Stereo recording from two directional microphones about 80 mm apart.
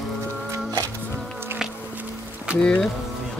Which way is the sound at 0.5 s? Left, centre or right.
Right.